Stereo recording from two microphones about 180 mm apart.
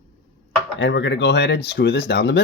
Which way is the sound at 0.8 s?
90° left.